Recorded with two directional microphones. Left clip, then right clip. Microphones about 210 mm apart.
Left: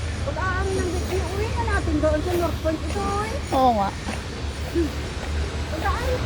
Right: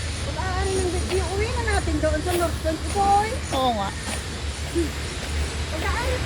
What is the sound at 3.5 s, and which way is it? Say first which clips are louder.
Speech: left 6 dB; 25° left (ahead or behind).